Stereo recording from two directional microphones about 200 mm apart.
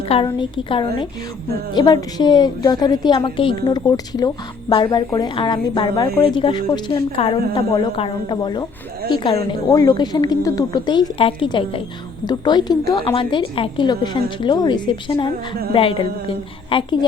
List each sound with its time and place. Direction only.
0.3 s a woman's voice: 25° left (ahead or behind)